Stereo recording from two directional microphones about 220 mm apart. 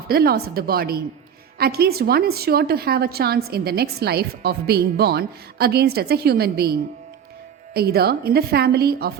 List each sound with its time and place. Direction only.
0.1 s a woman's voice: 45° right (ahead or behind)